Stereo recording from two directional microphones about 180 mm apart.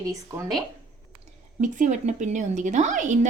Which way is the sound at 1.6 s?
45° right (ahead or behind).